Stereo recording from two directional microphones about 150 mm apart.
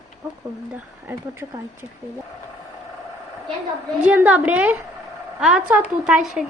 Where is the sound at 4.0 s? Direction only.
10° right (ahead or behind).